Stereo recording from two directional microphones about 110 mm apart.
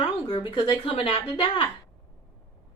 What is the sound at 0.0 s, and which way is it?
Speech, 45° left (ahead or behind).